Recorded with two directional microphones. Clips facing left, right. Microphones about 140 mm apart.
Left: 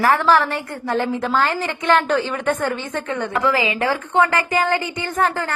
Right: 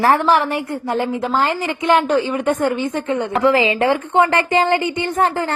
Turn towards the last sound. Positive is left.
turn(degrees=-20)  # may be behind; listen again after turning